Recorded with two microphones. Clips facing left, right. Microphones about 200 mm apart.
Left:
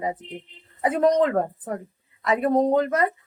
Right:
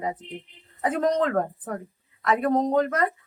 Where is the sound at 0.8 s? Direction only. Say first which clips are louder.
Left 4 dB; 10° left (ahead or behind).